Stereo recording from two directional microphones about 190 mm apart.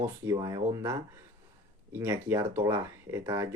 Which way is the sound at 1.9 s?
15° right (ahead or behind).